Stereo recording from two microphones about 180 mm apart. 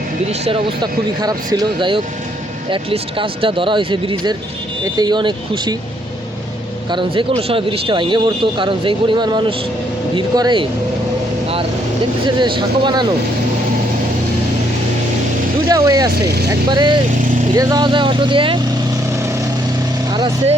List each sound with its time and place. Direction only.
0.3 s speech: 35° right (ahead or behind)
6.9 s speech: 30° right (ahead or behind)
12.4 s speech: 25° right (ahead or behind)
15.7 s speech: 20° right (ahead or behind)
16.2 s speech: 65° right (ahead or behind)
16.5 s speech: 25° right (ahead or behind)
20.1 s vehicle: 25° right (ahead or behind)